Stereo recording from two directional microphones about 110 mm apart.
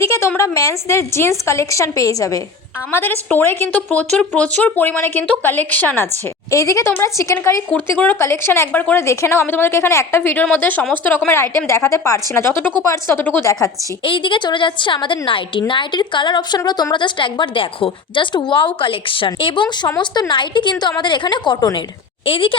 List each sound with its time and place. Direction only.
0.0 s speech: 25° left (ahead or behind)
2.9 s speech: 20° left (ahead or behind)
6.5 s speech: 30° left (ahead or behind)
7.7 s speech: 15° left (ahead or behind)
14.0 s a woman's voice: 50° left (ahead or behind)
22.3 s a woman's voice: 55° left (ahead or behind)